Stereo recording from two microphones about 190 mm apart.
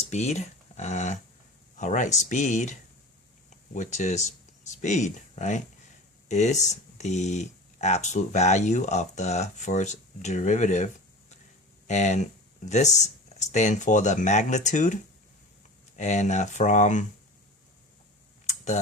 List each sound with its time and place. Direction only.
0.1 s speech: 35° left (ahead or behind)
3.8 s speech: 40° left (ahead or behind)
11.9 s speech: 40° left (ahead or behind)
16.0 s speech: 40° left (ahead or behind)
18.4 s tick: 40° left (ahead or behind)